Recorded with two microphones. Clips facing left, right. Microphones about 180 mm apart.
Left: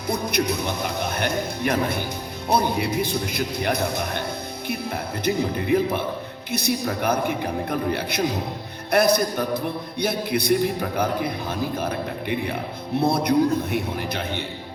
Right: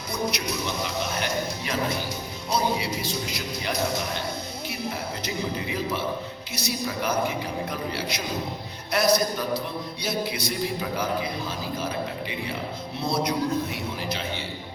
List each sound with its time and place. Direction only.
0.1 s a man's voice: 55° left (ahead or behind)